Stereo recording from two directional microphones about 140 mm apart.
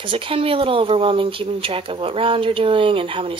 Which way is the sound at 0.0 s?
40° right (ahead or behind).